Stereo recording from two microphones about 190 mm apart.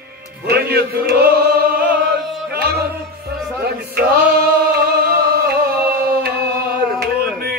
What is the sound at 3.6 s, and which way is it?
Male singing, 55° right (ahead or behind).